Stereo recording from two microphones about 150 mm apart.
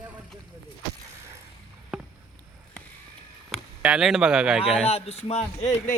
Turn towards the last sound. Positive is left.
turn(degrees=50)  # may be behind; listen again after turning